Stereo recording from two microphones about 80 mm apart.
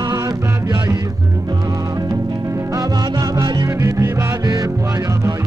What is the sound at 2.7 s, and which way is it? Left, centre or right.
Music, right.